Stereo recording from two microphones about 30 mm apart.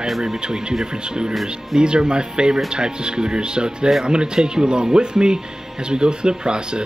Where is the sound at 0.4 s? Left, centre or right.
Right.